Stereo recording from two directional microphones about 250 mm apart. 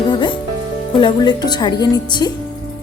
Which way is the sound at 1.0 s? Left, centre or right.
Centre.